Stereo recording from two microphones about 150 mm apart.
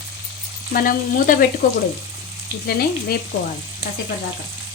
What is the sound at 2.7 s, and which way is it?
Frying, 90° left.